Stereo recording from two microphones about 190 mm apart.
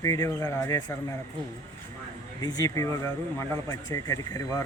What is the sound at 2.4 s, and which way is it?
A man's voice, 20° left (ahead or behind).